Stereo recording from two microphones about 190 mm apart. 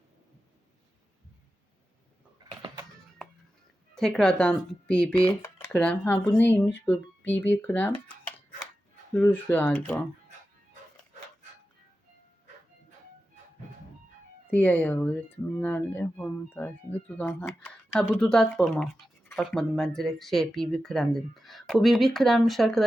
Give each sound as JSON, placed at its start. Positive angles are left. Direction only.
{"t": 2.5, "sound": "a sound", "side_deg": -20}
{"t": 3.9, "sound": "speech", "side_deg": 5}
{"t": 9.1, "sound": "speech", "side_deg": 10}
{"t": 14.5, "sound": "speech", "side_deg": 10}